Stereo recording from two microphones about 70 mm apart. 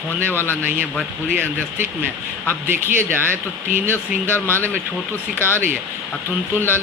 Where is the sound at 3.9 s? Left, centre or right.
Left.